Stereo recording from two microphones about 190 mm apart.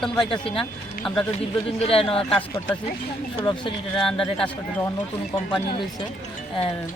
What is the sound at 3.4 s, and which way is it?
Speech, 20° left (ahead or behind).